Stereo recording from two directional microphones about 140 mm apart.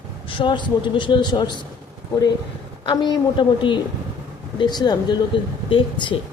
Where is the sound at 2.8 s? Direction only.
30° left (ahead or behind).